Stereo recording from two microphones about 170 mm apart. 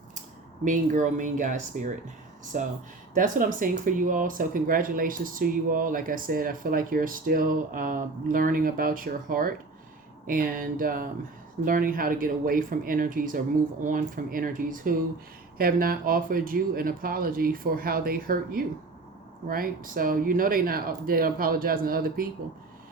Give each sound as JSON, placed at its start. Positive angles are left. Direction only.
{"t": 0.6, "sound": "speech", "side_deg": -50}